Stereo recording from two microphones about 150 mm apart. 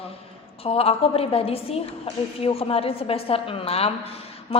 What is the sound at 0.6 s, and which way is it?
A woman's voice, 40° left (ahead or behind).